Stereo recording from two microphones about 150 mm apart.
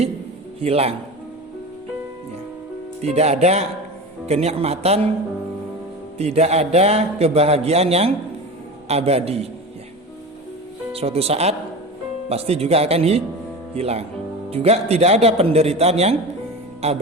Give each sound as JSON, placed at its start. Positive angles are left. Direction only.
{"t": 0.6, "sound": "speech", "side_deg": -40}
{"t": 3.0, "sound": "speech", "side_deg": -45}
{"t": 6.1, "sound": "speech", "side_deg": -45}
{"t": 10.9, "sound": "speech", "side_deg": -40}